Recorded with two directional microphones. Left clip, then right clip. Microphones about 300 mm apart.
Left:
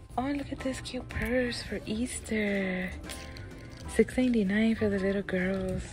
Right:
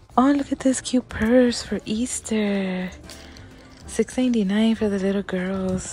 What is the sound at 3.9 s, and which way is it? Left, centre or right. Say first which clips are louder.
Speech: right 4 dB; centre.